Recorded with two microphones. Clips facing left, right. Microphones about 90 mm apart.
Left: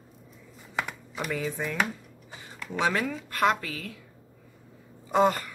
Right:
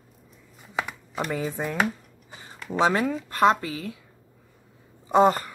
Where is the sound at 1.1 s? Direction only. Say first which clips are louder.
Right 3 dB; 35° right (ahead or behind).